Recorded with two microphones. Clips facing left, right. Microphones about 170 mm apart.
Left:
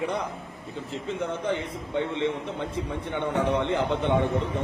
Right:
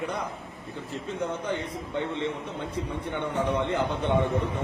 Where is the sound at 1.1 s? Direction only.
25° left (ahead or behind).